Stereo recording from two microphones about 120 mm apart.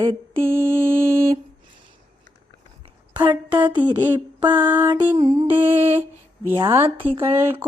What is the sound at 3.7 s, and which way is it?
Mantra, 40° right (ahead or behind).